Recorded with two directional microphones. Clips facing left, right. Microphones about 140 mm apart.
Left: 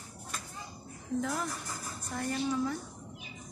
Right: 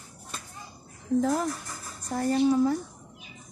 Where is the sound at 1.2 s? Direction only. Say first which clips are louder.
Right 8 dB; 40° right (ahead or behind).